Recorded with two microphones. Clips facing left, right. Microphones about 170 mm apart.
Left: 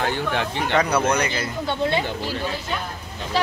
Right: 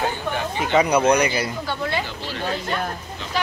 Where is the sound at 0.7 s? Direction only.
15° right (ahead or behind).